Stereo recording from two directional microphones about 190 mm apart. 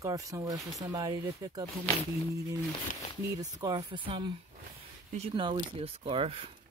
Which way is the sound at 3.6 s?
20° right (ahead or behind).